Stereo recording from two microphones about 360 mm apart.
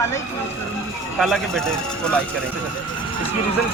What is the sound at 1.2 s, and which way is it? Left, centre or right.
Speech, centre.